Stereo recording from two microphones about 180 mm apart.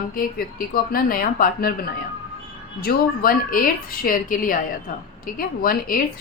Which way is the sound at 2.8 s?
55° left (ahead or behind).